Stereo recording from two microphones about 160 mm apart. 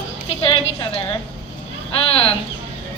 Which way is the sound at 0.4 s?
35° left (ahead or behind).